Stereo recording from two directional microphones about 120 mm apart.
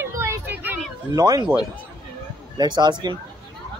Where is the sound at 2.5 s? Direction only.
35° right (ahead or behind).